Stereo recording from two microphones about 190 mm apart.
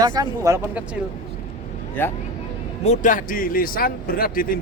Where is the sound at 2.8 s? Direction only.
40° left (ahead or behind).